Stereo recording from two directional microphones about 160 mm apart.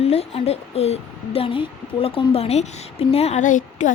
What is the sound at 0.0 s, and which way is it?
Speech, 40° left (ahead or behind).